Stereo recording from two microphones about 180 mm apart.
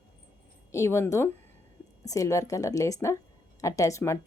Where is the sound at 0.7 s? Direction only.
15° left (ahead or behind).